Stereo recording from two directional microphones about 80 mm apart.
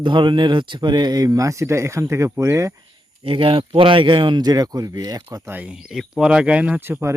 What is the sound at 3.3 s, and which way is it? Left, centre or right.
Speech, right.